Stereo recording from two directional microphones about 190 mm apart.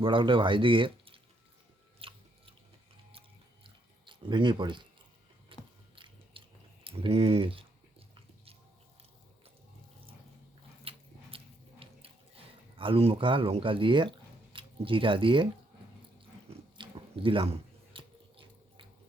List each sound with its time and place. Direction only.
0.0 s speech: 25° right (ahead or behind)
2.0 s chewing: 30° right (ahead or behind)
5.5 s biting: 25° right (ahead or behind)
6.3 s a sound: 25° right (ahead or behind)
6.8 s chewing: 30° right (ahead or behind)
10.8 s biting: 30° right (ahead or behind)
16.5 s chewing: 25° right (ahead or behind)